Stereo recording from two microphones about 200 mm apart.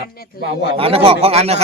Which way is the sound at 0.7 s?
30° right (ahead or behind).